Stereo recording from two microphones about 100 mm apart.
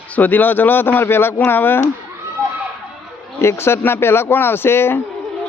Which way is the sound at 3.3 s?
25° left (ahead or behind).